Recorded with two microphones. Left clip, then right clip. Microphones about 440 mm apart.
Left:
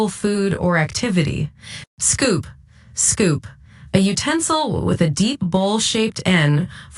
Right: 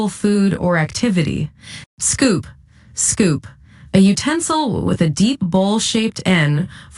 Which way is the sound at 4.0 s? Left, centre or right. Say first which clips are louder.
Right 3 dB; centre.